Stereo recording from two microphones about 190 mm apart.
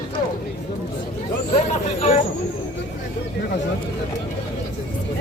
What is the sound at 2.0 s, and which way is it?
Vehicle, 35° left (ahead or behind).